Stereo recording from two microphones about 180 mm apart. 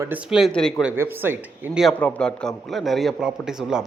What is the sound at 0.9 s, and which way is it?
Speech, 10° right (ahead or behind).